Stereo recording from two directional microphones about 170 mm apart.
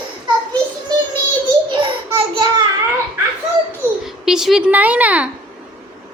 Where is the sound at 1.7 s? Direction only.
30° right (ahead or behind).